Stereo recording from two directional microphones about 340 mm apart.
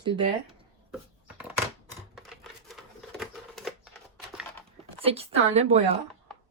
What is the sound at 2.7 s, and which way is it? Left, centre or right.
Typewriter, centre.